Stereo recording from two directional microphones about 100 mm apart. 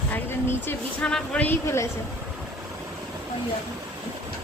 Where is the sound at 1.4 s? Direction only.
25° left (ahead or behind).